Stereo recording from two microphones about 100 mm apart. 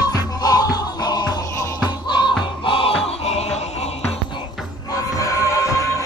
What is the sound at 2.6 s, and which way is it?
Music, 60° left (ahead or behind).